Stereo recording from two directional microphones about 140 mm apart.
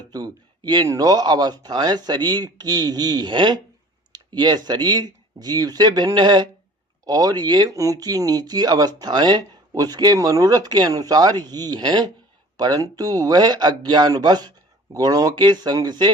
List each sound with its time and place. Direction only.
0.1 s a man's voice: 30° right (ahead or behind)